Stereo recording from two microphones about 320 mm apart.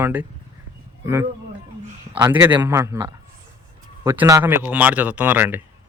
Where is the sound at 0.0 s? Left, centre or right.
Centre.